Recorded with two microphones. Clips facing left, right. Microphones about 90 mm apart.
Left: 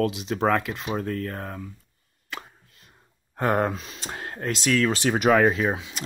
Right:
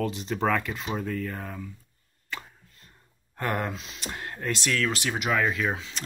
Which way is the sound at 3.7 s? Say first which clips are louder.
Left 2 dB; 45° left (ahead or behind).